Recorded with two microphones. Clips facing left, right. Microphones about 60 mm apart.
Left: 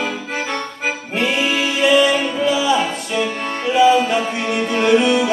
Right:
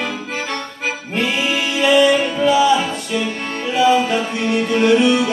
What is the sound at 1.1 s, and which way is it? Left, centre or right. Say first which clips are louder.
Music: left 1 dB; centre.